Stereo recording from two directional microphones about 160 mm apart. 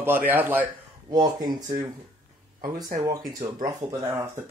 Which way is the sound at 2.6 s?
65° right (ahead or behind).